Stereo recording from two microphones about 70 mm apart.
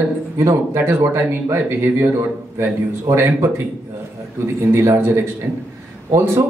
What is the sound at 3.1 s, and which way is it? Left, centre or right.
Speech, right.